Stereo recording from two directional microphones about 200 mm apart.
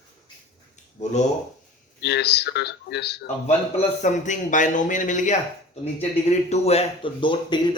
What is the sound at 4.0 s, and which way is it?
A man's voice, 40° left (ahead or behind).